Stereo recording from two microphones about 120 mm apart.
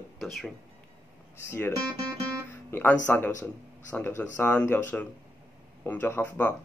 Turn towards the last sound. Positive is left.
turn(degrees=15)  # may be behind; listen again after turning